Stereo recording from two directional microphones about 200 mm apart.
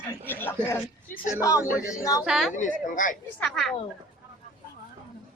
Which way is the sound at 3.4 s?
5° left (ahead or behind).